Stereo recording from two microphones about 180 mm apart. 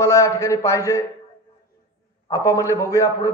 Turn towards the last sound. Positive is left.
turn(degrees=15)  # may be behind; listen again after turning